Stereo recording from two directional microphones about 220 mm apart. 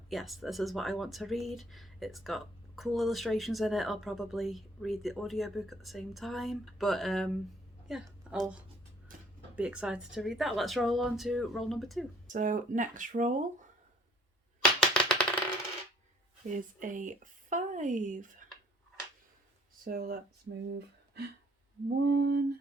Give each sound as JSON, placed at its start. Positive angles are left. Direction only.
{"t": 0.1, "sound": "speech", "side_deg": 0}
{"t": 7.9, "sound": "a sound", "side_deg": 0}
{"t": 9.1, "sound": "a sound", "side_deg": -40}
{"t": 9.6, "sound": "speech", "side_deg": -5}
{"t": 12.3, "sound": "speech", "side_deg": -35}
{"t": 14.8, "sound": "typewriter", "side_deg": 5}
{"t": 16.5, "sound": "speech", "side_deg": -35}
{"t": 19.8, "sound": "speech", "side_deg": -45}
{"t": 22.0, "sound": "a sound", "side_deg": -50}